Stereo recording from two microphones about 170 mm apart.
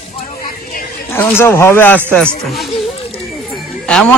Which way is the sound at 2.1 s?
Centre (ahead or behind).